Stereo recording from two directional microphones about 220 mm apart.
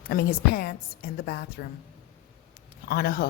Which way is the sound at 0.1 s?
45° left (ahead or behind).